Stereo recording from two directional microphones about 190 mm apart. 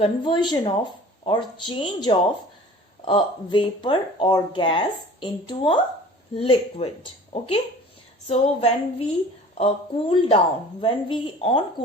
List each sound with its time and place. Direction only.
0.0 s a woman's voice: 30° left (ahead or behind)
8.3 s a woman's voice: 35° left (ahead or behind)